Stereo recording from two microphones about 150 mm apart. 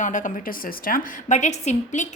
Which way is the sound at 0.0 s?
55° left (ahead or behind).